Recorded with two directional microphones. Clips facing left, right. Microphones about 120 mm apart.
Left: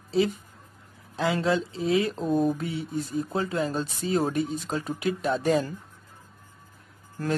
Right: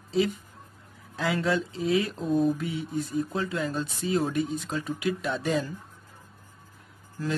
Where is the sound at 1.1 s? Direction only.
25° left (ahead or behind).